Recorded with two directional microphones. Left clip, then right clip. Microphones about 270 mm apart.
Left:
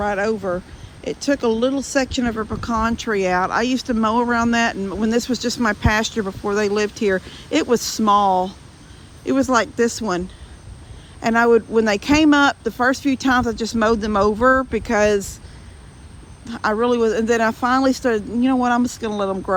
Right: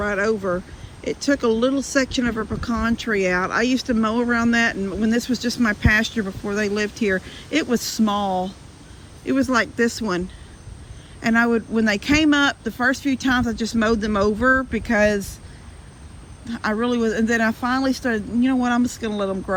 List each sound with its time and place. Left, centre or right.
0.0 s speech: centre
16.5 s speech: centre